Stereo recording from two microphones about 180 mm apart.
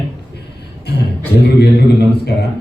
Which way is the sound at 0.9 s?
65° left (ahead or behind).